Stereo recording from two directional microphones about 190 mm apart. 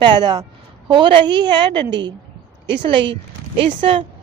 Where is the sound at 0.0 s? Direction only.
20° right (ahead or behind).